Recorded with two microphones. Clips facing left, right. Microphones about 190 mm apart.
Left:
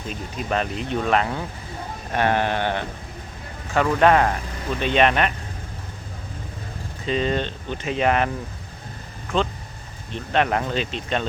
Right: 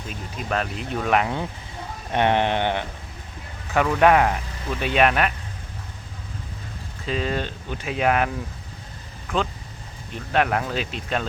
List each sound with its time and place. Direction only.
0.1 s speech: centre (ahead or behind)
2.1 s sheep: 20° right (ahead or behind)
3.8 s speech: 10° right (ahead or behind)
7.0 s speech: 5° right (ahead or behind)
10.3 s speech: 5° right (ahead or behind)